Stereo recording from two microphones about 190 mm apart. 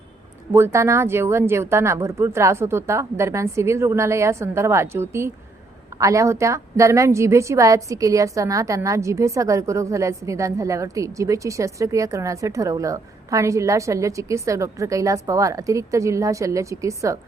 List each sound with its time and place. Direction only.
0.5 s a woman's voice: 15° right (ahead or behind)